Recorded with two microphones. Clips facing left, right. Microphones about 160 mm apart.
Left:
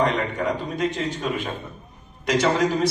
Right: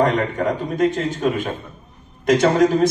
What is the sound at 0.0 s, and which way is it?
Speech, 45° right (ahead or behind).